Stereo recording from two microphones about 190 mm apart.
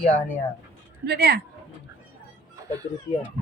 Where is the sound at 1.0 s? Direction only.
55° right (ahead or behind).